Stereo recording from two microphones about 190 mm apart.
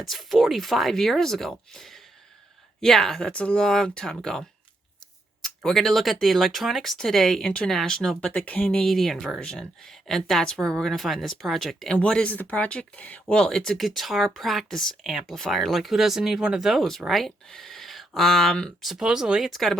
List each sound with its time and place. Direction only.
0.1 s speech: centre (ahead or behind)